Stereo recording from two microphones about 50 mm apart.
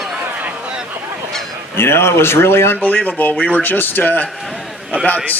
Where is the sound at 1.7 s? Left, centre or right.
Left.